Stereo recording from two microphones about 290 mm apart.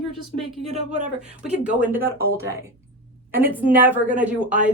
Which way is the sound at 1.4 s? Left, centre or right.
Centre.